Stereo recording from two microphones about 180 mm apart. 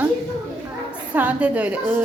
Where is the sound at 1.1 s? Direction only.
10° right (ahead or behind).